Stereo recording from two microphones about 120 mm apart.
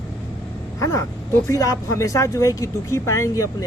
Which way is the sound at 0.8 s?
25° left (ahead or behind).